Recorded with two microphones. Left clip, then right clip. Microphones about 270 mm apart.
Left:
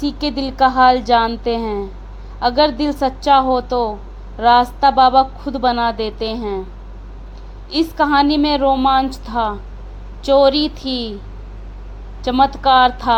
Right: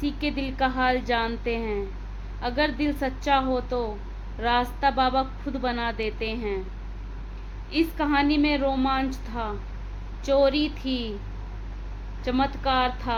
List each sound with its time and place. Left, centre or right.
0.0 s speech: centre
7.7 s speech: left
12.2 s speech: left